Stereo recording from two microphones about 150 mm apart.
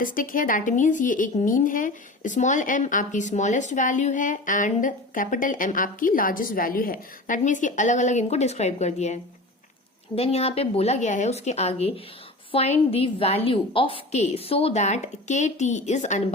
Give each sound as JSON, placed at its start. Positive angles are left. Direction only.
{"t": 0.0, "sound": "speech", "side_deg": 65}
{"t": 10.2, "sound": "a woman's voice", "side_deg": 40}